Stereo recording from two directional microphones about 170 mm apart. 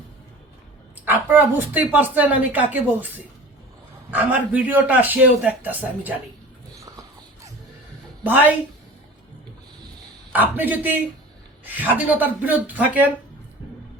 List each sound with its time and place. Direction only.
1.0 s speech: 10° right (ahead or behind)
4.1 s speech: 10° right (ahead or behind)
6.7 s a sound: 20° right (ahead or behind)
8.2 s speech: 10° right (ahead or behind)
10.3 s speech: 10° right (ahead or behind)